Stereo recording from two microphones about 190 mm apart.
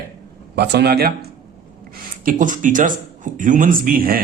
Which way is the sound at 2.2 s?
45° right (ahead or behind).